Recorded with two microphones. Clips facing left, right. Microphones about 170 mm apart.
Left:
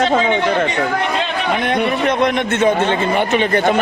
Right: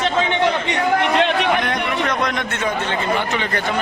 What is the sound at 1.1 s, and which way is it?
Chatter, 70° right (ahead or behind).